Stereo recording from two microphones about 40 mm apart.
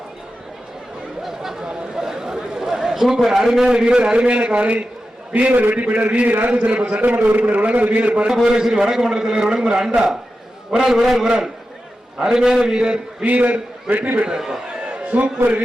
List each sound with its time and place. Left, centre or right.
1.2 s chatter: centre
2.0 s a man's voice: centre; by 7.0 s right
7.0 s a man's voice: right
8.4 s a man's voice: centre
13.2 s a man's voice: right
14.3 s a man's voice: centre
14.8 s a sound: right